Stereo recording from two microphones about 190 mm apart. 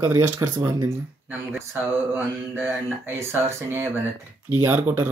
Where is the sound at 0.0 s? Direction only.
15° right (ahead or behind).